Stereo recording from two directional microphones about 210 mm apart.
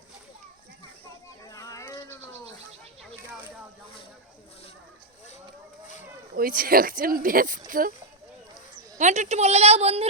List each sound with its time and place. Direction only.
1.5 s a sound: 15° left (ahead or behind)
6.3 s a woman's voice: 40° right (ahead or behind)
9.0 s a woman's voice: 35° right (ahead or behind)